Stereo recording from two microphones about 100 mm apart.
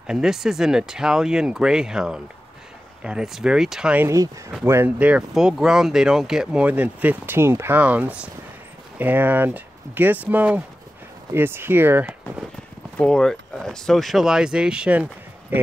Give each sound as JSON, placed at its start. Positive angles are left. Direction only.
{"t": 0.0, "sound": "speech", "side_deg": -5}
{"t": 4.1, "sound": "speech", "side_deg": -30}
{"t": 4.9, "sound": "speech", "side_deg": -15}
{"t": 12.9, "sound": "speech", "side_deg": 5}